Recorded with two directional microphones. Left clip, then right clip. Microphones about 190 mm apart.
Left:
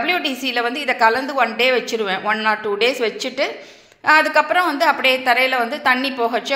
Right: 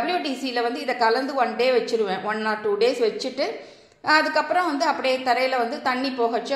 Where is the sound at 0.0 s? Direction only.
5° left (ahead or behind).